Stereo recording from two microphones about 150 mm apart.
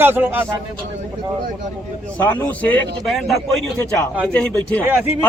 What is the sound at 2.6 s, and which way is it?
Speech, 10° left (ahead or behind).